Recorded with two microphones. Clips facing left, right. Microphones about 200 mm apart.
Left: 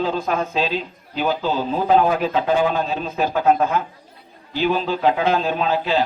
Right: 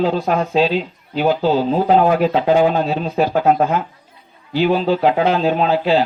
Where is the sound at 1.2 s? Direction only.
45° right (ahead or behind).